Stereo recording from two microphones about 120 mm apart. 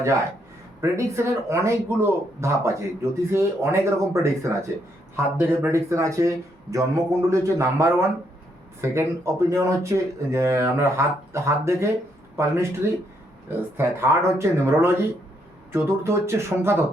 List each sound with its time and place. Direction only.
0.8 s speech: 25° right (ahead or behind)